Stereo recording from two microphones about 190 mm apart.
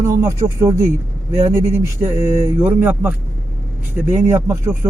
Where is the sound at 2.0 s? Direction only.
15° right (ahead or behind).